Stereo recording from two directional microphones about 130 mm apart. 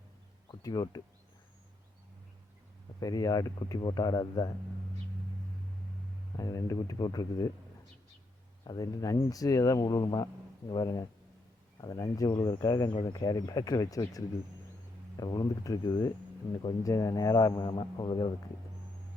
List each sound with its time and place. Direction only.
0.6 s speech: 30° left (ahead or behind)
3.0 s speech: 30° left (ahead or behind)
6.3 s speech: 25° left (ahead or behind)
8.6 s a man's voice: 30° left (ahead or behind)
15.2 s a man's voice: 30° left (ahead or behind)